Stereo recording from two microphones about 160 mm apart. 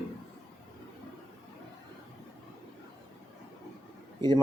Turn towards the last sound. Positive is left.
turn(degrees=-25)  # may be behind; listen again after turning